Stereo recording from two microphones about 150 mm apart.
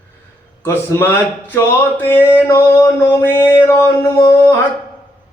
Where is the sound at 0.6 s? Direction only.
15° left (ahead or behind).